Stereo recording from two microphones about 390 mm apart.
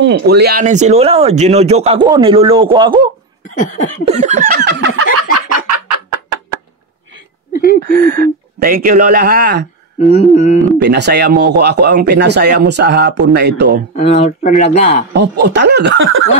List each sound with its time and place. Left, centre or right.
0.0 s speech: right
3.4 s a sound: centre
4.0 s speech: centre
4.6 s fowl: right
5.7 s a sound: right
7.8 s speech: right
10.0 s speech: centre
10.8 s speech: right
13.9 s speech: centre
15.1 s speech: right